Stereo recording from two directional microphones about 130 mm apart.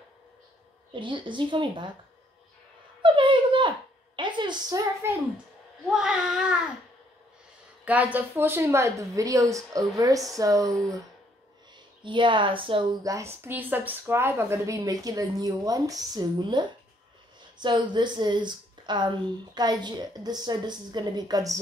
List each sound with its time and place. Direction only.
0.9 s speech: 40° right (ahead or behind)
3.0 s a sound: 40° right (ahead or behind)
5.0 s speech: 20° right (ahead or behind)
5.9 s speech: 5° right (ahead or behind)
7.8 s speech: 10° right (ahead or behind)
12.0 s speech: 40° right (ahead or behind)
13.0 s speech: 25° right (ahead or behind)